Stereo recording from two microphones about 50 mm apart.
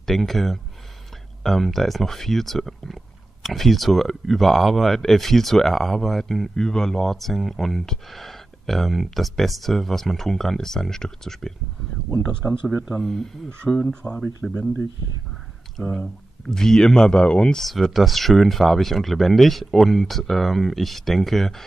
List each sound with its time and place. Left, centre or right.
0.0 s speech: centre
12.9 s speech: centre
15.8 s speech: centre
16.4 s speech: centre
17.9 s speech: centre